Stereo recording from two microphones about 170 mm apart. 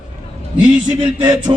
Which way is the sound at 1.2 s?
25° right (ahead or behind).